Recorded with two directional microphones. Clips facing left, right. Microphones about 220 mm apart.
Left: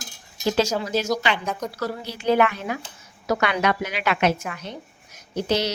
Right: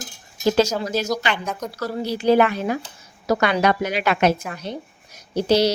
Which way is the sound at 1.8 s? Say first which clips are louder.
Right 8 dB; 35° right (ahead or behind).